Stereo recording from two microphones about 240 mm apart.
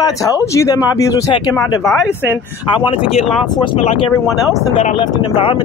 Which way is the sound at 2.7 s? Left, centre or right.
Left.